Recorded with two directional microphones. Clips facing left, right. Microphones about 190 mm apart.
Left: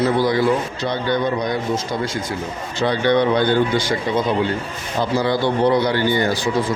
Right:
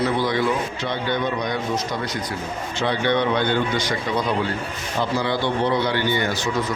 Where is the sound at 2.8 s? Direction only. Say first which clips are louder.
Left 4 dB; 35° left (ahead or behind).